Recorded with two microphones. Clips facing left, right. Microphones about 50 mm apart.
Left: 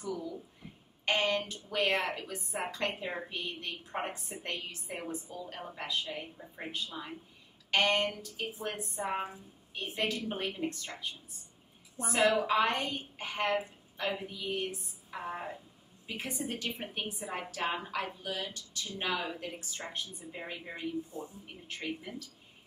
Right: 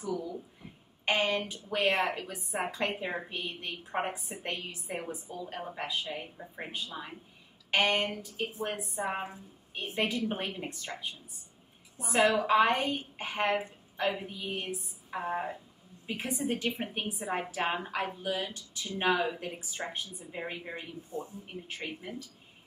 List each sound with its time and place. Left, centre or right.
1.0 s speech: centre
1.8 s a woman's voice: centre
2.1 s a woman's voice: centre
12.4 s a woman's voice: centre